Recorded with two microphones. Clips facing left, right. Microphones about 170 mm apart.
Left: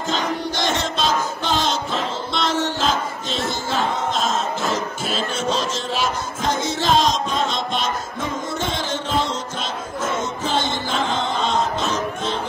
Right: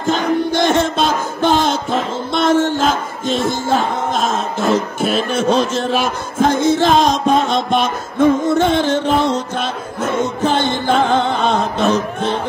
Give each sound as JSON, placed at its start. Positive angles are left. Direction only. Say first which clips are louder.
{"t": 0.0, "sound": "music", "louder": "right 7 dB", "side_deg": -55}